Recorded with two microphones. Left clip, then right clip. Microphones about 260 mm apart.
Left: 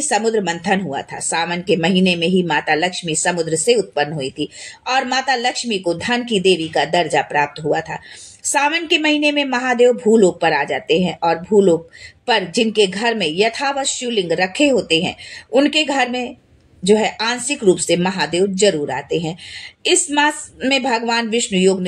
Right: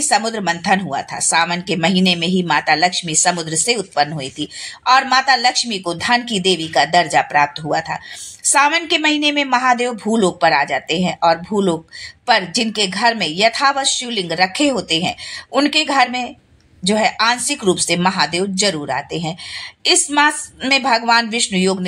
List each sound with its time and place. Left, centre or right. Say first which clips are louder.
0.0 s speech: even; right